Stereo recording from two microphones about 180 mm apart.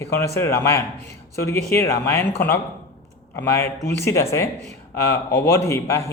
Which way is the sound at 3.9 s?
15° left (ahead or behind).